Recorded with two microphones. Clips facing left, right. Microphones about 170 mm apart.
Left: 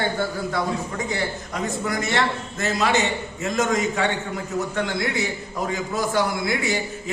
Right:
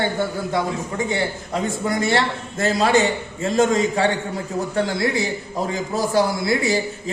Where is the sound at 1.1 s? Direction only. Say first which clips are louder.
Right 3 dB; 25° right (ahead or behind).